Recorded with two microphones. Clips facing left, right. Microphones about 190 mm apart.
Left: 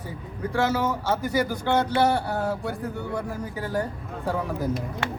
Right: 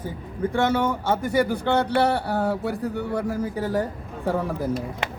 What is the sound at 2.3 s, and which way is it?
Speech, 30° right (ahead or behind).